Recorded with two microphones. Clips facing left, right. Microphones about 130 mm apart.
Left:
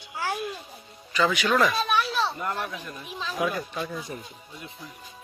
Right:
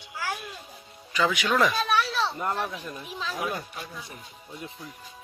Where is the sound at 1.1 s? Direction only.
15° right (ahead or behind).